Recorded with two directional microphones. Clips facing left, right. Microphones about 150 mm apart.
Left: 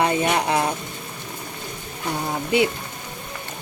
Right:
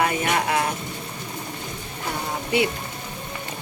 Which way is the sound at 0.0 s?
25° left (ahead or behind).